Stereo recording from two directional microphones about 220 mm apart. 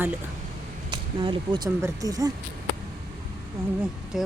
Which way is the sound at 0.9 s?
20° right (ahead or behind).